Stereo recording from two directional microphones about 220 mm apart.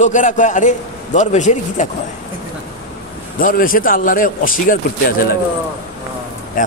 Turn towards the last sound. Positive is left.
turn(degrees=40)  # may be behind; listen again after turning